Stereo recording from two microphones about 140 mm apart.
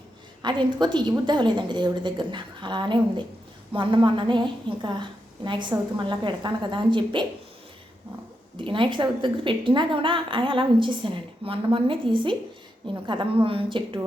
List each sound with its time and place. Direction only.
0.4 s a woman's voice: 30° right (ahead or behind)
8.5 s a woman's voice: 35° right (ahead or behind)